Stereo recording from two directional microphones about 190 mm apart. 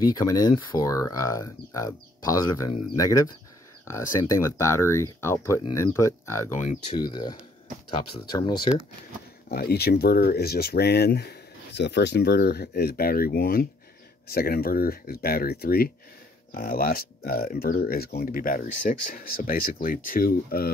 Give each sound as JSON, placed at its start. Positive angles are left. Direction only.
{"t": 0.1, "sound": "speech", "side_deg": 20}
{"t": 6.5, "sound": "speech", "side_deg": 40}
{"t": 7.0, "sound": "speech", "side_deg": 25}
{"t": 9.5, "sound": "speech", "side_deg": 55}